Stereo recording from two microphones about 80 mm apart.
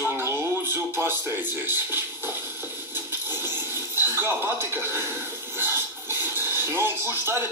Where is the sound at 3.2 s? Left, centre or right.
Right.